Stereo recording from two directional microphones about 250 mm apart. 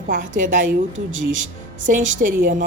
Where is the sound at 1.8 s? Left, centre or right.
Right.